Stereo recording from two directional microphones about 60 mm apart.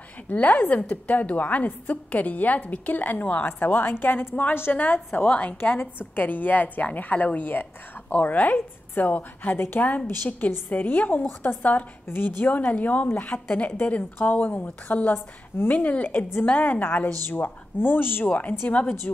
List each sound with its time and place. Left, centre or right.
0.3 s a woman's voice: left
5.8 s a woman's voice: left
12.1 s a woman's voice: left
15.5 s speech: left
15.8 s a woman's voice: left
18.2 s a woman's voice: left